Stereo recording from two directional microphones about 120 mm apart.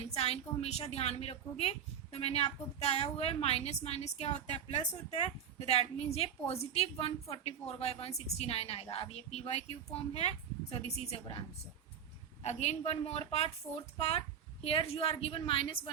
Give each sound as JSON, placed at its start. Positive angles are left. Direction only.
{"t": 0.1, "sound": "a woman's voice", "side_deg": 60}
{"t": 14.6, "sound": "a woman's voice", "side_deg": 50}